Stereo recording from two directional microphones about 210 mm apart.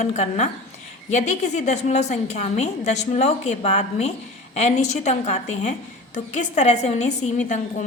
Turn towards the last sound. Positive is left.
turn(degrees=35)  # may be behind; listen again after turning